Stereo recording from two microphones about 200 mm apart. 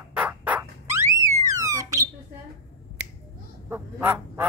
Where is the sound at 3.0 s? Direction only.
60° right (ahead or behind).